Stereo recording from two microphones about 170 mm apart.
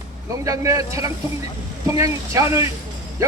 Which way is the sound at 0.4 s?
20° right (ahead or behind).